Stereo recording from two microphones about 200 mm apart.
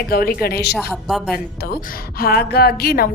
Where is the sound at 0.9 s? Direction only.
Centre (ahead or behind).